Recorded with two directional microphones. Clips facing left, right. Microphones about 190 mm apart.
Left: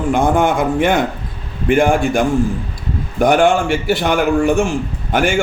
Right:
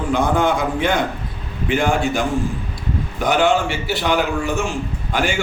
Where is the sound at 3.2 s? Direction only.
50° left (ahead or behind).